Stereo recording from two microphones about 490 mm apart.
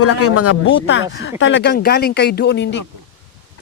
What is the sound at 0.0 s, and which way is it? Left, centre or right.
Speech, left.